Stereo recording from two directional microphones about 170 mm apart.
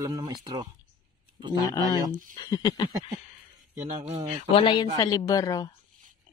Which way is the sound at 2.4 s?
25° left (ahead or behind).